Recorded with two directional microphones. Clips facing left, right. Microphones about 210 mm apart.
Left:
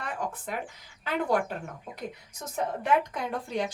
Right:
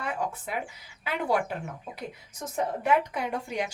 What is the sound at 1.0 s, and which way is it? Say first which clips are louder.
Speech: left 1 dB; 10° right (ahead or behind).